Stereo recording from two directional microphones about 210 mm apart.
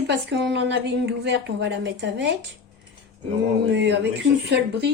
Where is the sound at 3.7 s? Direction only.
55° right (ahead or behind).